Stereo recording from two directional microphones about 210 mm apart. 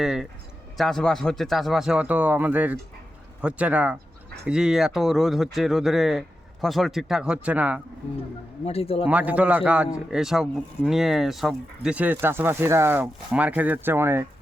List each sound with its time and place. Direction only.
0.0 s speech: 5° right (ahead or behind)
8.6 s a man's voice: 30° left (ahead or behind)
9.0 s speech: 5° right (ahead or behind)